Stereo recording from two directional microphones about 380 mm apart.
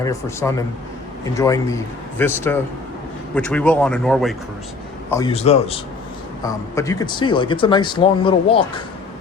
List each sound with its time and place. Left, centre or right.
0.0 s speech: centre
5.1 s speech: centre